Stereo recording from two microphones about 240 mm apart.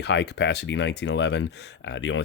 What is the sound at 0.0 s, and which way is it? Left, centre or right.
Speech, left.